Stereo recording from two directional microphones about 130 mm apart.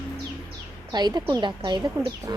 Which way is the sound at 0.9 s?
35° right (ahead or behind).